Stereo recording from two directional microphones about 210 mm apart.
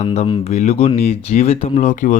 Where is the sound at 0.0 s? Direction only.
30° left (ahead or behind).